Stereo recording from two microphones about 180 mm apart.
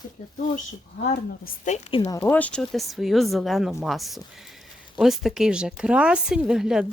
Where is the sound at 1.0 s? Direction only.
50° left (ahead or behind).